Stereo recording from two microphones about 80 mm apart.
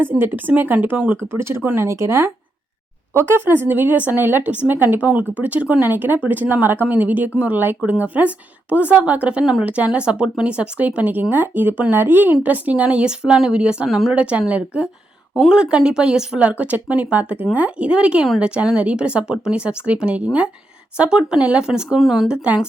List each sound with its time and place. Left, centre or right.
0.0 s speech: right